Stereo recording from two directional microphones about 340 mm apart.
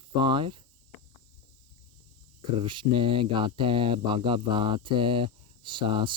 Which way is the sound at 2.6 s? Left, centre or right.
Centre.